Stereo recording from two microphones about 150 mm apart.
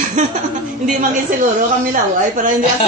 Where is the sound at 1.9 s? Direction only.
60° right (ahead or behind).